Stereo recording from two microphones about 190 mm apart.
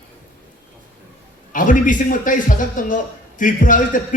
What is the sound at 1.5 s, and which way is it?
A man's voice, 45° left (ahead or behind).